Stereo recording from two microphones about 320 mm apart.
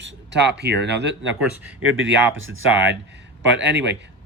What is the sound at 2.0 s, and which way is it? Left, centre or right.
Speech, right.